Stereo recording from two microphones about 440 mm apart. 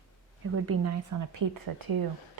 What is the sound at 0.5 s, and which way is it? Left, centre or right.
Speech, right.